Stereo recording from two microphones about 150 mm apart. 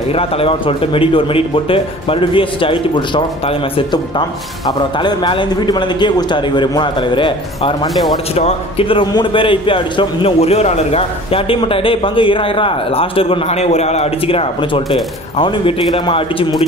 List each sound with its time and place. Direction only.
0.1 s a man's voice: 40° left (ahead or behind)